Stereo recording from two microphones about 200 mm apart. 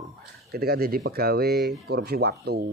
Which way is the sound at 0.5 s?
50° right (ahead or behind).